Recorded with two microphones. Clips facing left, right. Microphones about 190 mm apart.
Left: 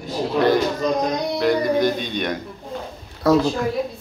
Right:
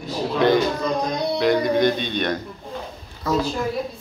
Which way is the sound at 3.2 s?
70° left (ahead or behind).